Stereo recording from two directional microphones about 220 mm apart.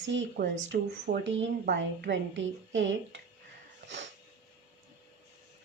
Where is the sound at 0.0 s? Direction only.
55° right (ahead or behind).